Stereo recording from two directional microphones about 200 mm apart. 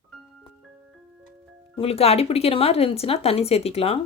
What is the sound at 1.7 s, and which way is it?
Speech, 30° left (ahead or behind).